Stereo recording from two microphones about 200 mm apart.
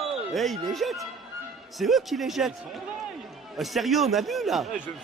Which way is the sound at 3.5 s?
Centre (ahead or behind).